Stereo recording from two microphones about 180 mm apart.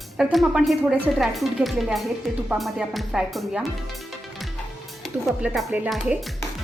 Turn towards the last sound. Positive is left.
turn(degrees=-5)  # may be behind; listen again after turning